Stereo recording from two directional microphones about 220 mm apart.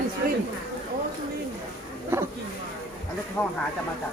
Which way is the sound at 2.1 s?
10° right (ahead or behind).